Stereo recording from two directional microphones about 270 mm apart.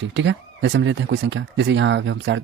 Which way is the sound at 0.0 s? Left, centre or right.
Right.